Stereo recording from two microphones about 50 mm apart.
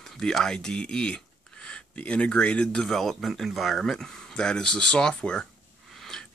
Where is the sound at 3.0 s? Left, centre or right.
Centre.